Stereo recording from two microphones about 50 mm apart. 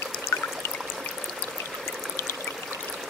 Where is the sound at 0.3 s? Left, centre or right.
Left.